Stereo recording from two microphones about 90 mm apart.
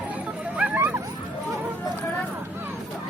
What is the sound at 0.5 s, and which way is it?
Dog, 20° right (ahead or behind).